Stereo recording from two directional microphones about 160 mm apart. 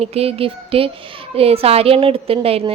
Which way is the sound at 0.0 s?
40° right (ahead or behind).